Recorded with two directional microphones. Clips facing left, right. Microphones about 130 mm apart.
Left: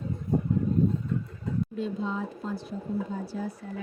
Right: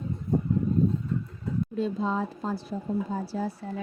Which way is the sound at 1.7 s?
35° right (ahead or behind).